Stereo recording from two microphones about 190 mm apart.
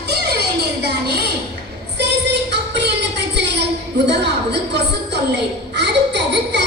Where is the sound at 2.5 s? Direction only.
65° right (ahead or behind).